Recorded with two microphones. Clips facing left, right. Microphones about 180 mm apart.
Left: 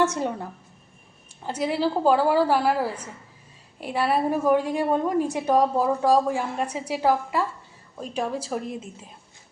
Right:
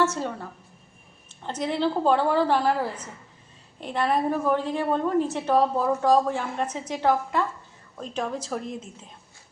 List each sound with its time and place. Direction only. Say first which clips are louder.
0.0 s a woman's voice: left 2 dB; 15° left (ahead or behind)
1.5 s a woman's voice: left 1 dB; 10° left (ahead or behind)